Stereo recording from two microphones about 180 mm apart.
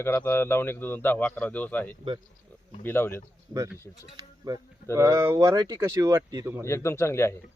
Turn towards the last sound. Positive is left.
turn(degrees=15)  # may be behind; listen again after turning